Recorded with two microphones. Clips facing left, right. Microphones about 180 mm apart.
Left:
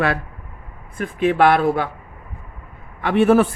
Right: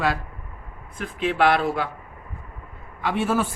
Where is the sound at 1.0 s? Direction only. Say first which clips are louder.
Left 5 dB; 50° left (ahead or behind).